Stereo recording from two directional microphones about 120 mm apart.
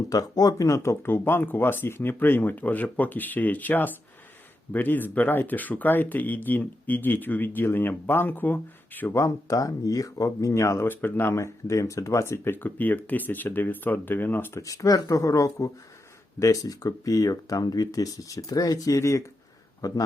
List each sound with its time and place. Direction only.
0.1 s speech: 30° left (ahead or behind)
14.6 s a man's voice: 30° left (ahead or behind)